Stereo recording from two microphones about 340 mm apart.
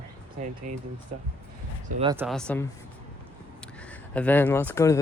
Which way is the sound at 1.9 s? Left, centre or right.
Centre.